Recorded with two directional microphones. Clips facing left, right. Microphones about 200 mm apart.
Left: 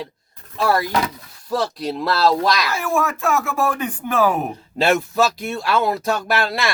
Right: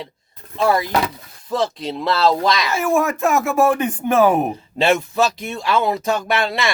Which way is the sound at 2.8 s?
25° right (ahead or behind).